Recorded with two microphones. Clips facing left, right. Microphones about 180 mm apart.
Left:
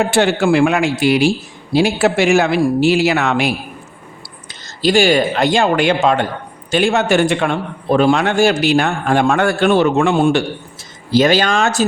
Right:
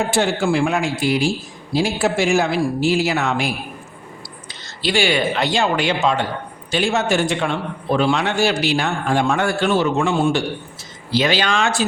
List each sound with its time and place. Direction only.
0.1 s speech: 70° left (ahead or behind)
4.8 s a man's voice: 45° left (ahead or behind); by 10.4 s 60° left (ahead or behind)
11.1 s speech: 45° left (ahead or behind)